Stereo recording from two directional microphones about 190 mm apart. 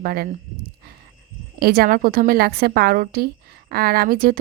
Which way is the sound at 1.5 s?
55° right (ahead or behind).